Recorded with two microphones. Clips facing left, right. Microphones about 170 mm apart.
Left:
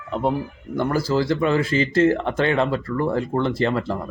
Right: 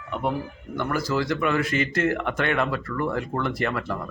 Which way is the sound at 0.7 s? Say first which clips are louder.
Left 5 dB; 30° left (ahead or behind).